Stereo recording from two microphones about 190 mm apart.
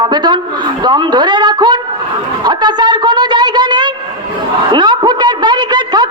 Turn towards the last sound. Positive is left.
turn(degrees=-20)  # may be behind; listen again after turning